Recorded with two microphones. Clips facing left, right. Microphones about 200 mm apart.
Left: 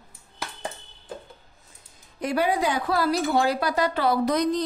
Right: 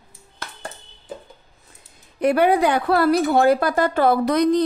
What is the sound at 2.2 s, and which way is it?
Speech, 60° right (ahead or behind).